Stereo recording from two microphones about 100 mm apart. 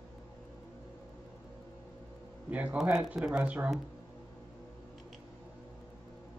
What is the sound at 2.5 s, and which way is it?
Speech, 15° right (ahead or behind).